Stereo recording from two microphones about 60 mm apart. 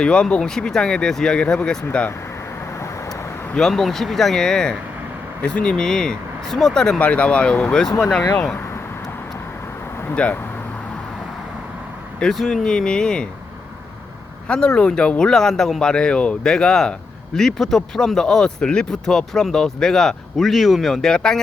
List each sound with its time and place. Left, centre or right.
0.0 s speech: centre
3.6 s speech: centre
7.0 s speech: left
10.2 s speech: centre
12.2 s speech: centre
14.4 s speech: centre